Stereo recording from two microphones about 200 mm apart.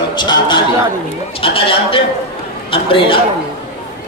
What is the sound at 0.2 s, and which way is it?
A man's voice, 20° left (ahead or behind).